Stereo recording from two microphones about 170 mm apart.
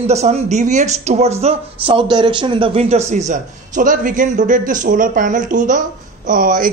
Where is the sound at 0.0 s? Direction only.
40° right (ahead or behind).